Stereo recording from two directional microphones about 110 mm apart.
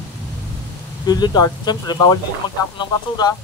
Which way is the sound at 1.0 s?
40° left (ahead or behind).